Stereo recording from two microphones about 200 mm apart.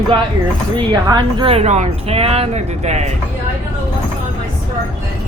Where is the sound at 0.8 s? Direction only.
20° right (ahead or behind).